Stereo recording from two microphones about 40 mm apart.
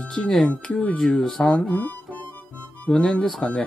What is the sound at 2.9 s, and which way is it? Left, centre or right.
Speech, centre.